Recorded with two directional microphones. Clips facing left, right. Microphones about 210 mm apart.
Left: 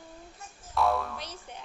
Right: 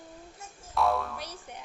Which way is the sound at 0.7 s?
Centre (ahead or behind).